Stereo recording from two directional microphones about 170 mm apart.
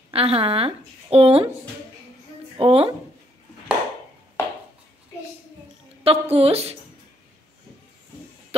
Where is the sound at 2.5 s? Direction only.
35° right (ahead or behind).